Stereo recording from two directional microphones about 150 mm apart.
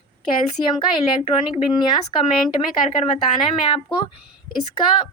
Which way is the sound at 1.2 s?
40° left (ahead or behind).